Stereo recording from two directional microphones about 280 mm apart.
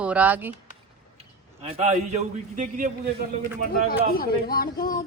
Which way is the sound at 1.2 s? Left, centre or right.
Right.